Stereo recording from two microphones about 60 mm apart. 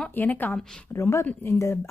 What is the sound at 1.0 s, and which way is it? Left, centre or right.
Speech, left.